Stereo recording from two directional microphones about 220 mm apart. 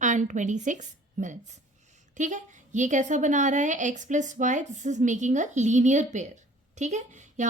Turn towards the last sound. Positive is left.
turn(degrees=-35)  # may be behind; listen again after turning